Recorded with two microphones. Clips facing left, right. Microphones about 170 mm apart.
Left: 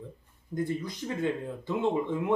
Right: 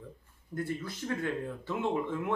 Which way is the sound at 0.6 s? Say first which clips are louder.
Left 4 dB; 15° left (ahead or behind).